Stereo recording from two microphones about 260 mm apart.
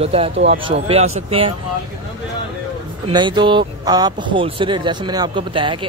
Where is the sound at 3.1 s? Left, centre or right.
Centre.